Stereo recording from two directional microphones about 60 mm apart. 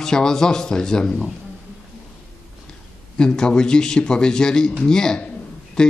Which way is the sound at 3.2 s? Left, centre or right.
Centre.